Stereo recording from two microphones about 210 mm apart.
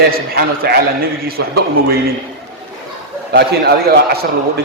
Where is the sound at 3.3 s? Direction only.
50° right (ahead or behind).